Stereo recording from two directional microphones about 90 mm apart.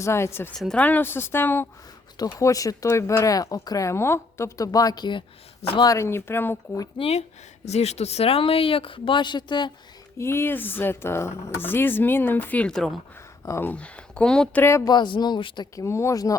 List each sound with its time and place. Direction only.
0.0 s speech: 30° left (ahead or behind)
0.5 s speech: 5° left (ahead or behind)
0.8 s speech: 20° left (ahead or behind)
2.1 s speech: 45° left (ahead or behind)
5.8 s speech: 40° left (ahead or behind)
6.1 s speech: 25° left (ahead or behind)
7.0 s speech: 55° left (ahead or behind)
8.2 s speech: 90° left; by 9.7 s 60° left (ahead or behind)
10.2 s speech: 30° left (ahead or behind)
12.6 s speech: 5° left (ahead or behind)
13.6 s speech: 15° left (ahead or behind)
14.5 s speech: 25° left (ahead or behind)
14.8 s speech: 60° left (ahead or behind)
15.7 s speech: 30° left (ahead or behind)